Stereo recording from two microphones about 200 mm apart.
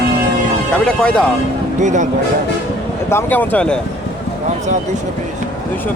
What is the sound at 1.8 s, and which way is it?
Speech, 35° right (ahead or behind).